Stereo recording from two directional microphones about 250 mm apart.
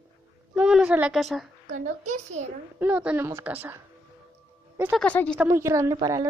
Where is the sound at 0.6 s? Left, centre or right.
Centre.